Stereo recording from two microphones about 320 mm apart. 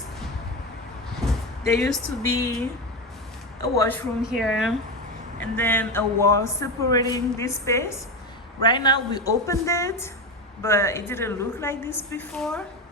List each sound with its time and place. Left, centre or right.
1.6 s speech: centre
3.8 s speech: centre